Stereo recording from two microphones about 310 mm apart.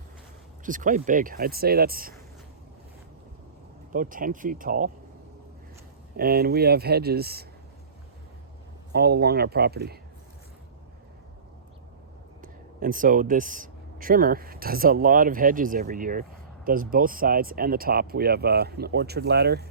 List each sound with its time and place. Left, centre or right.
0.6 s speech: right
3.9 s speech: right
6.1 s speech: right
8.9 s speech: right
12.4 s speech: right